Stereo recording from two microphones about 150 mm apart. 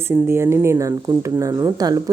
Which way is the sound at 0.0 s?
15° right (ahead or behind).